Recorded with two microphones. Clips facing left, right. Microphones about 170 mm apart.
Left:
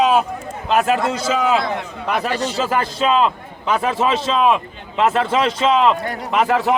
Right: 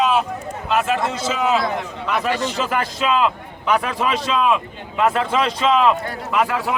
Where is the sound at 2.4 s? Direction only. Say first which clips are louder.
Left 2 dB; 35° left (ahead or behind).